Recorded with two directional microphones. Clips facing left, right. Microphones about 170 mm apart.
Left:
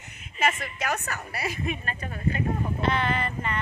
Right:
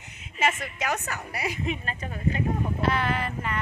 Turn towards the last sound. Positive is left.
turn(degrees=-5)  # may be behind; listen again after turning